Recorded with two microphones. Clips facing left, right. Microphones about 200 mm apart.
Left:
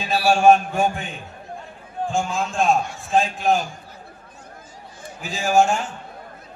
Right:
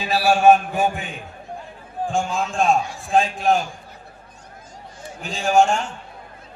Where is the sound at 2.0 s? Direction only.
Centre (ahead or behind).